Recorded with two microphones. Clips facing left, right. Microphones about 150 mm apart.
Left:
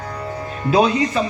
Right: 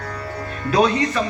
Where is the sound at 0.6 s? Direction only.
25° left (ahead or behind).